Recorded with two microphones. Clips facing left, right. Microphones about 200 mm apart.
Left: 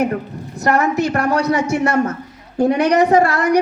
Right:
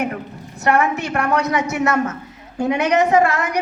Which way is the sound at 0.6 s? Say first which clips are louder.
Left 2 dB; 40° left (ahead or behind).